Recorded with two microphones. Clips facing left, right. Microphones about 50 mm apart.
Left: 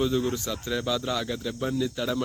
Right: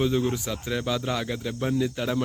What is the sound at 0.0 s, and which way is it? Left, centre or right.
Speech, right.